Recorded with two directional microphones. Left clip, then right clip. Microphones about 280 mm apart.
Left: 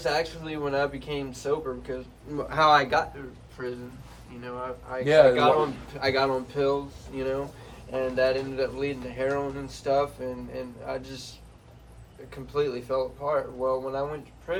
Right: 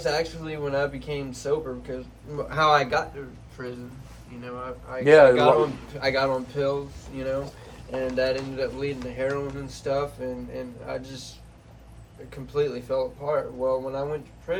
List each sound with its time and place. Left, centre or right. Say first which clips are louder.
0.0 s speech: right 1 dB; centre
5.0 s speech: right 4 dB; right
5.3 s speech: right 3 dB; centre
12.3 s speech: right 1 dB; centre